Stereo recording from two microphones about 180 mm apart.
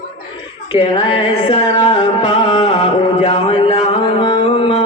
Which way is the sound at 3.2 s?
30° left (ahead or behind).